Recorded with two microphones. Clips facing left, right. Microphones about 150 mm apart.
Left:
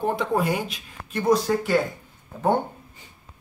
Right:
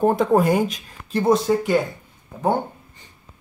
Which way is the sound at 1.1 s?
25° right (ahead or behind).